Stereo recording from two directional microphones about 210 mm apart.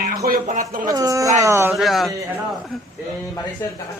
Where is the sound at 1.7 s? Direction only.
Centre (ahead or behind).